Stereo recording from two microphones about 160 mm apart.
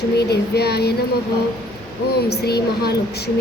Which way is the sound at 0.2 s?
90° left.